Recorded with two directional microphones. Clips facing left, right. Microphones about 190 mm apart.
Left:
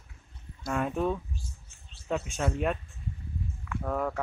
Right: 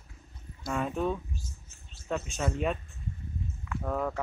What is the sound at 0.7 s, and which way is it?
Speech, 5° left (ahead or behind).